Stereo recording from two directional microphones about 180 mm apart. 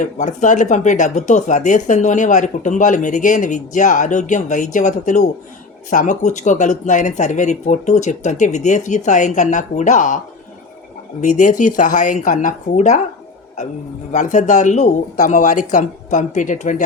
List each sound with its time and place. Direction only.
0.0 s speech: 45° left (ahead or behind)
11.2 s speech: 45° left (ahead or behind)
14.1 s speech: 45° left (ahead or behind)